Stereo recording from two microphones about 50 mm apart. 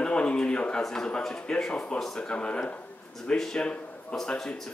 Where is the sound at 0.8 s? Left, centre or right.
Centre.